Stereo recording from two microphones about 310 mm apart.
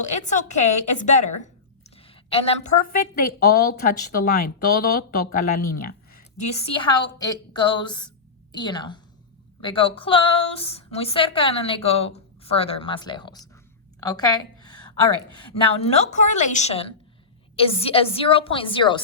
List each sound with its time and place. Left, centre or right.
0.0 s a woman's voice: left
14.0 s a sound: centre
15.5 s a woman's voice: centre